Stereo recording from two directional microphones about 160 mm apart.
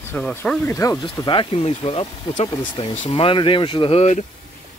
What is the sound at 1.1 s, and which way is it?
Speech, 30° left (ahead or behind).